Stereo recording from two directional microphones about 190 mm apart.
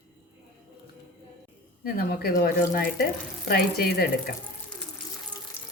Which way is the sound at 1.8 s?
50° left (ahead or behind).